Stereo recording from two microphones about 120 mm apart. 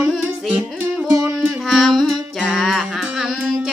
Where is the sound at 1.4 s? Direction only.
Centre (ahead or behind).